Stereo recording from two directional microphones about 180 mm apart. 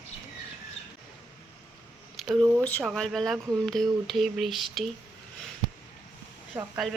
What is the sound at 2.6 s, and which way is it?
Speech, 10° left (ahead or behind).